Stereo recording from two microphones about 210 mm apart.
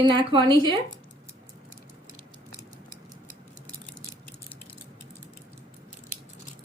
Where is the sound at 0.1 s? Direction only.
20° right (ahead or behind).